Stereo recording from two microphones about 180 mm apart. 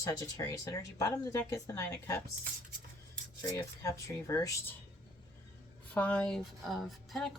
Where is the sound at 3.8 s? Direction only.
15° left (ahead or behind).